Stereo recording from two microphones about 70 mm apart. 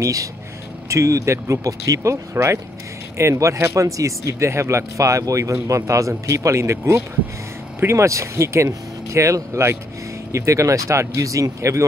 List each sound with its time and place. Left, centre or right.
0.0 s speech: right
2.3 s speech: right